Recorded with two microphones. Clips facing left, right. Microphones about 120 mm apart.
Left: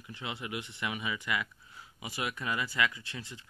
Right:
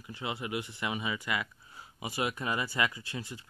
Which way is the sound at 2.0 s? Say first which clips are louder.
Right 3 dB; 40° right (ahead or behind).